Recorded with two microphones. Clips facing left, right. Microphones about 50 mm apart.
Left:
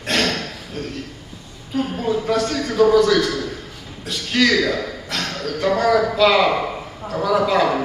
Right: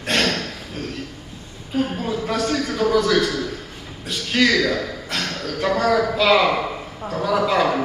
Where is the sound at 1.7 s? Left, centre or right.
Centre.